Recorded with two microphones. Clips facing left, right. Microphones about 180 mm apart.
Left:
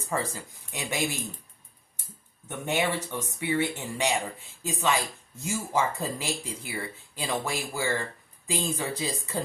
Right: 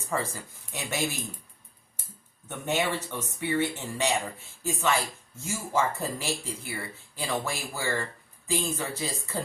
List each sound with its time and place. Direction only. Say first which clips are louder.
0.1 s speech: even; 15° left (ahead or behind)
2.5 s speech: even; 15° left (ahead or behind)